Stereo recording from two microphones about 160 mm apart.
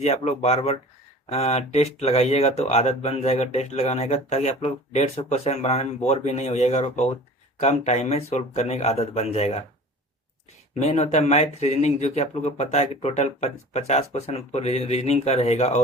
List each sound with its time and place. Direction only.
0.0 s speech: 40° left (ahead or behind)
10.8 s speech: 45° left (ahead or behind)